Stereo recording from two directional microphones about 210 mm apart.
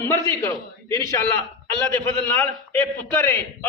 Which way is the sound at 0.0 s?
15° left (ahead or behind).